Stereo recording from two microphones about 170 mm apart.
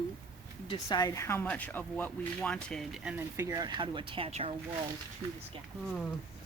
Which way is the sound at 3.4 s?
20° right (ahead or behind).